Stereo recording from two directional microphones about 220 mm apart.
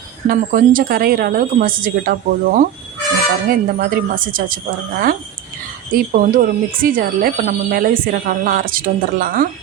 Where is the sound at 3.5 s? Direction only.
40° right (ahead or behind).